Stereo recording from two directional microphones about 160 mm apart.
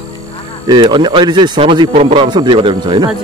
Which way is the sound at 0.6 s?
30° right (ahead or behind).